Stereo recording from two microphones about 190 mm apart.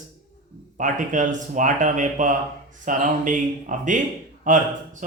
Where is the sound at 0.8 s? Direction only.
40° right (ahead or behind).